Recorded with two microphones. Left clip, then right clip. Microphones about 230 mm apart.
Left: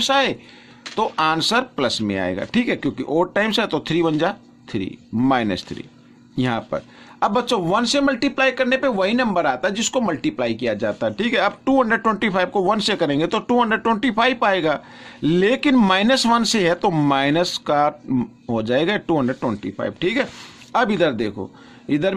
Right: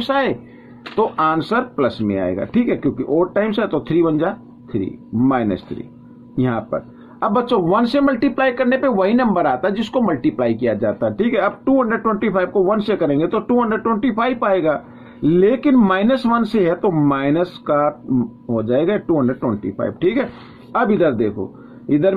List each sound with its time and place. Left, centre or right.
0.0 s speech: left